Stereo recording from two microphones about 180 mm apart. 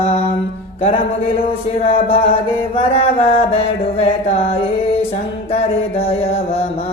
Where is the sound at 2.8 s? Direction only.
30° left (ahead or behind).